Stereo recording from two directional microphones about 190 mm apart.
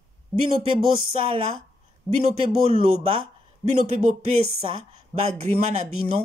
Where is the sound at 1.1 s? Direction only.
30° right (ahead or behind).